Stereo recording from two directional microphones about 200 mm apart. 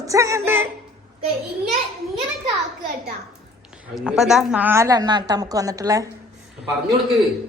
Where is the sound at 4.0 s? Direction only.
Centre (ahead or behind).